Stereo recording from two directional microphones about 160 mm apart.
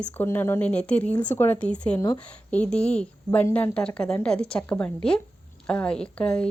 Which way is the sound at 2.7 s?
5° left (ahead or behind).